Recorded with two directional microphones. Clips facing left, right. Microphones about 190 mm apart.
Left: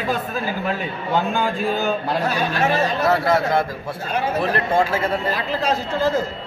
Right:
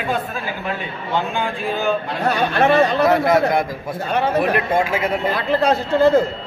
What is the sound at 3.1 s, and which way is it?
Speech, 15° right (ahead or behind).